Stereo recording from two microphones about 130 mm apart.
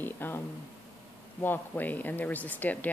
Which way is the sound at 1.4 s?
15° left (ahead or behind).